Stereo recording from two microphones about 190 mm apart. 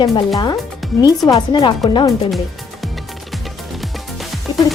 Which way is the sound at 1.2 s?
20° left (ahead or behind).